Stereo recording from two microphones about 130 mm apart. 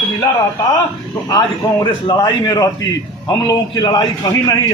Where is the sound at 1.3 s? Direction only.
35° left (ahead or behind).